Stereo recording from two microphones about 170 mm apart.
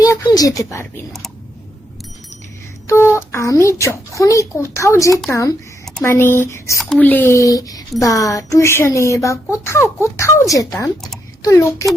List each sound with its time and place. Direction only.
0.0 s speech: 20° left (ahead or behind)
2.8 s speech: 15° left (ahead or behind)
5.8 s a sound: 5° left (ahead or behind)
6.1 s speech: 15° left (ahead or behind)